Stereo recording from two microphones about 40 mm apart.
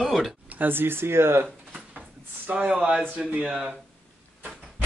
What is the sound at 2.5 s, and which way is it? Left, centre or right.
Speech, right.